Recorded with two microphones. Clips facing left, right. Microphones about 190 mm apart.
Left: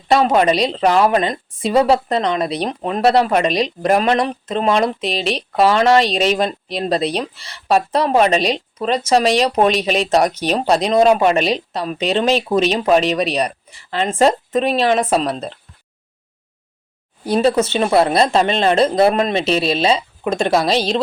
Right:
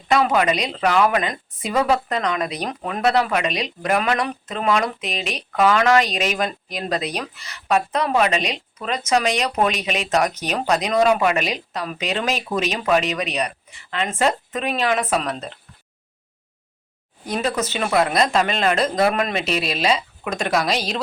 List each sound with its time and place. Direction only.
0.1 s a woman's voice: 30° left (ahead or behind)
17.2 s a woman's voice: 30° left (ahead or behind)